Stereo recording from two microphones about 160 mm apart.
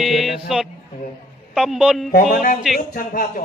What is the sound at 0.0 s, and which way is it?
Music, centre (ahead or behind).